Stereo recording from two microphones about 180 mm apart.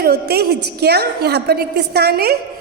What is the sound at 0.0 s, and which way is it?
A woman's voice, 60° right (ahead or behind).